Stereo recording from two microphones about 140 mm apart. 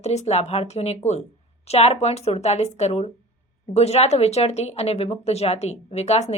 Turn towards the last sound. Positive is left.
turn(degrees=50)  # may be behind; listen again after turning